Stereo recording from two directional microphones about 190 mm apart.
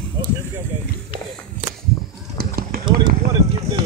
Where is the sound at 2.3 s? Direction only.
50° right (ahead or behind).